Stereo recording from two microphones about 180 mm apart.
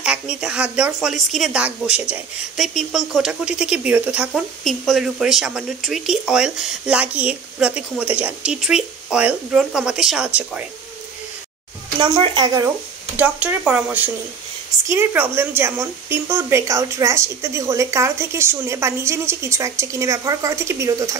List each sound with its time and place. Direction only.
0.0 s speech: 5° right (ahead or behind)
12.0 s speech: 25° right (ahead or behind)